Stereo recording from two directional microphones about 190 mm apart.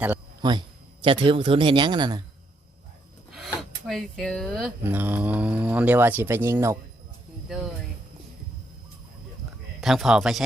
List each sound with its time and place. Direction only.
0.4 s a man's voice: 20° right (ahead or behind)
3.3 s speech: centre (ahead or behind)
4.8 s speech: 10° right (ahead or behind)
7.4 s speech: centre (ahead or behind)
9.8 s speech: centre (ahead or behind)